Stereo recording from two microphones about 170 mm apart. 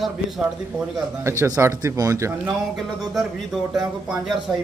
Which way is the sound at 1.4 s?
15° right (ahead or behind).